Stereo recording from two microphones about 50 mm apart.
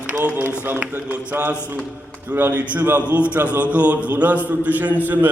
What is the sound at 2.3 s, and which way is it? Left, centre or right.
A man's voice, right.